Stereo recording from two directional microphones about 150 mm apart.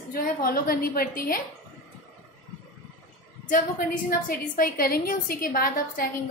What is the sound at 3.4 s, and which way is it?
A woman's voice, 65° left (ahead or behind).